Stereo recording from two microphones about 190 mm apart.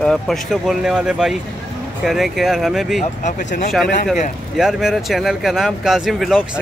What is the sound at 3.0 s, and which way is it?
Speech, 40° left (ahead or behind).